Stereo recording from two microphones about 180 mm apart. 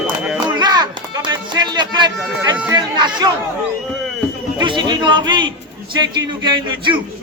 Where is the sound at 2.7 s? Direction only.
25° right (ahead or behind).